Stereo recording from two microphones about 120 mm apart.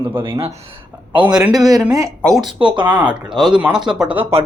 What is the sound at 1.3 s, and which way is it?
Speech, 35° right (ahead or behind).